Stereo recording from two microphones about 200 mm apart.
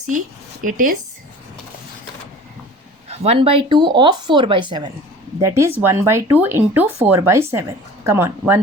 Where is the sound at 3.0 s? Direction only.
30° right (ahead or behind).